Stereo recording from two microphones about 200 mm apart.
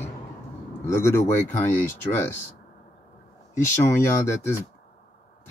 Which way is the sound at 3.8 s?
15° left (ahead or behind).